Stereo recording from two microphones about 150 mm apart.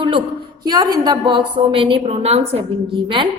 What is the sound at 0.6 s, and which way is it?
A woman's voice, 25° right (ahead or behind).